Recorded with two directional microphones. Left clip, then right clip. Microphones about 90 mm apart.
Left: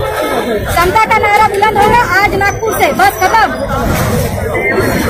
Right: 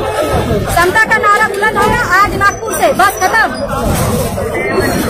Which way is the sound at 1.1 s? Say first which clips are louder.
Left 1 dB; 30° right (ahead or behind).